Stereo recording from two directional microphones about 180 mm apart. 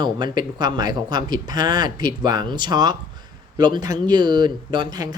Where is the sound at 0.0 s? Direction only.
25° right (ahead or behind).